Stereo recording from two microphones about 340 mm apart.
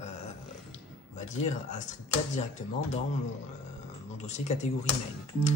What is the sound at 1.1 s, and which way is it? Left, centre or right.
Speech, left.